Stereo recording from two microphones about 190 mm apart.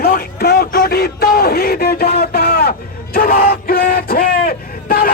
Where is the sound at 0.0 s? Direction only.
55° left (ahead or behind).